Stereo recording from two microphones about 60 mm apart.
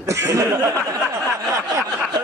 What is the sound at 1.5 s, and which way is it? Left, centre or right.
Speech, right.